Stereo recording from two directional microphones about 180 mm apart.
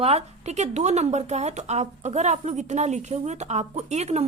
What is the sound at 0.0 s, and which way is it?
Speech, 35° right (ahead or behind).